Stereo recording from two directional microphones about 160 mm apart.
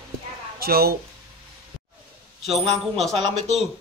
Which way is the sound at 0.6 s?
70° right (ahead or behind).